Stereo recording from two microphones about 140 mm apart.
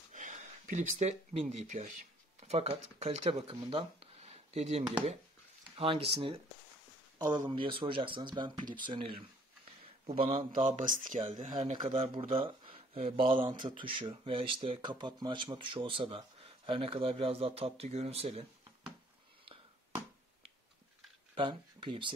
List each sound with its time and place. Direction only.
0.1 s a sound: 65° right (ahead or behind)
1.3 s speech: 50° right (ahead or behind)
7.2 s speech: 30° right (ahead or behind)
10.5 s speech: 65° right (ahead or behind)
11.9 s speech: 40° right (ahead or behind)
21.4 s speech: 35° right (ahead or behind)